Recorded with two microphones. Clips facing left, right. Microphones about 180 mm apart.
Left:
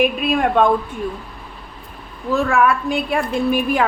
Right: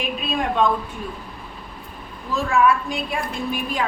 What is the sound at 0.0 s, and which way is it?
Speech, 55° left (ahead or behind).